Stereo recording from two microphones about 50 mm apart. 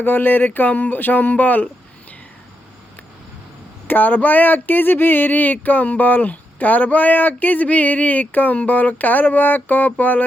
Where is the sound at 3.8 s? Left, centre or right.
Left.